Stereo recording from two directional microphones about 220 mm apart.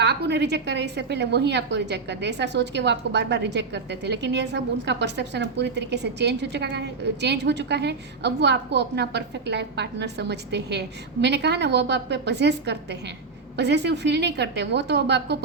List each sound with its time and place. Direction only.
0.0 s a woman's voice: 50° right (ahead or behind)